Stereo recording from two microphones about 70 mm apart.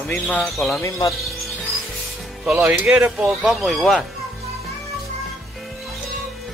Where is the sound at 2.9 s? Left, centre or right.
Centre.